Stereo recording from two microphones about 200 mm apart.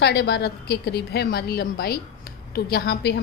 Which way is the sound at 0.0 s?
55° left (ahead or behind).